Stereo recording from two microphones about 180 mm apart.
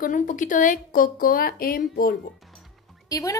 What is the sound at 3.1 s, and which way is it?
Speech, 20° left (ahead or behind).